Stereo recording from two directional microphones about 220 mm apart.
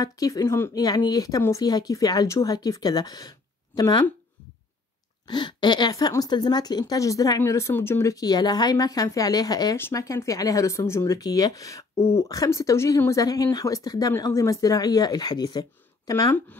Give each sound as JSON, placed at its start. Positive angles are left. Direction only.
{"t": 0.0, "sound": "a woman's voice", "side_deg": 15}
{"t": 5.2, "sound": "a woman's voice", "side_deg": 20}